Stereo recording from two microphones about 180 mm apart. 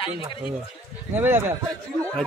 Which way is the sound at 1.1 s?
10° right (ahead or behind).